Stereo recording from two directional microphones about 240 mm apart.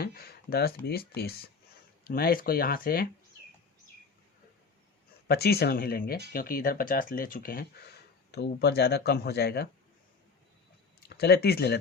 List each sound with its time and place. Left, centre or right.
0.0 s speech: left
5.3 s speech: left
11.1 s speech: left